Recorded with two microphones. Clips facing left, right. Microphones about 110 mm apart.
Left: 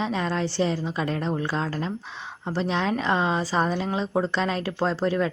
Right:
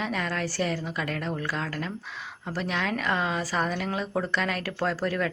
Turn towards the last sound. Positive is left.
turn(degrees=25)  # may be behind; listen again after turning